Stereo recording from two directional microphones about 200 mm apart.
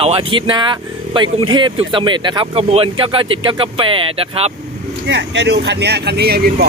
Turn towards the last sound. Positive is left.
turn(degrees=-55)  # may be behind; listen again after turning